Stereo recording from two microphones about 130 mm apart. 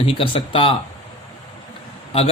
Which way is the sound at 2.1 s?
50° left (ahead or behind).